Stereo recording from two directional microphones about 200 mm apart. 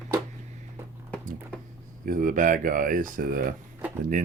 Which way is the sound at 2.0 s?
40° right (ahead or behind).